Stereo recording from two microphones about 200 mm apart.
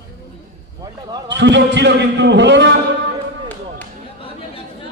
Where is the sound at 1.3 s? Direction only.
60° right (ahead or behind).